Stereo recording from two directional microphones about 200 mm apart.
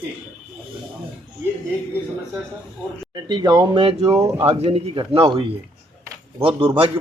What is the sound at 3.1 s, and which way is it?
Speech, 20° right (ahead or behind).